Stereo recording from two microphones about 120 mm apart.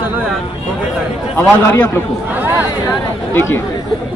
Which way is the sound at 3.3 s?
20° left (ahead or behind).